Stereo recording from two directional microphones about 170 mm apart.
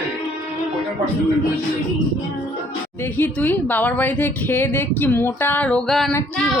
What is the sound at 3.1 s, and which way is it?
Speech, 10° left (ahead or behind).